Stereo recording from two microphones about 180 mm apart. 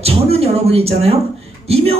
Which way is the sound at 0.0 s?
35° right (ahead or behind).